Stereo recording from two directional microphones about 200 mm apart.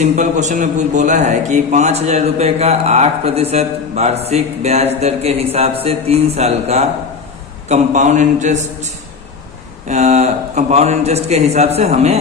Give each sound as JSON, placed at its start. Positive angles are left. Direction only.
{"t": 0.0, "sound": "a man's voice", "side_deg": -35}